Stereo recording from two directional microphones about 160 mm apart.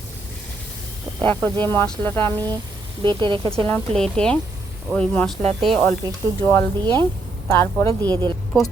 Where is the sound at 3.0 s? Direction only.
30° right (ahead or behind).